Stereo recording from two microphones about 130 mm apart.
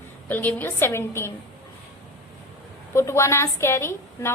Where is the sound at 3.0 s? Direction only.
20° left (ahead or behind).